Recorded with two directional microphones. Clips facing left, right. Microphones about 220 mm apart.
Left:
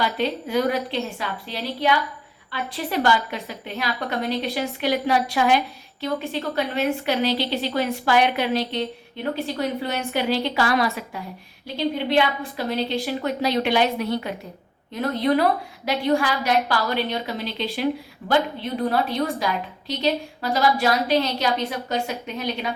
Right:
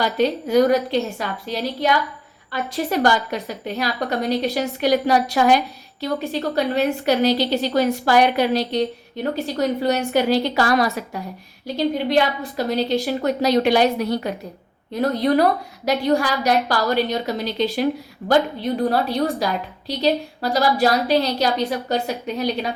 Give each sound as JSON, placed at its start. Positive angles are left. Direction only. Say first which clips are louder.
{"t": 0.0, "sound": "a woman's voice", "louder": "right 4 dB", "side_deg": -40}